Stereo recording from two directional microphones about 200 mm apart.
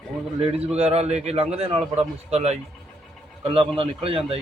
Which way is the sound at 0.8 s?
30° right (ahead or behind).